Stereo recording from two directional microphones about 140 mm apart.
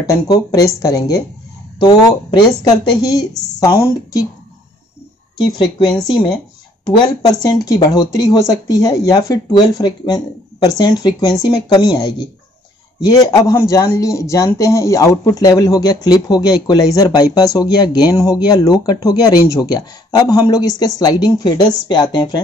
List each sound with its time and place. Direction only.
0.0 s speech: 25° left (ahead or behind)
5.4 s speech: 30° left (ahead or behind)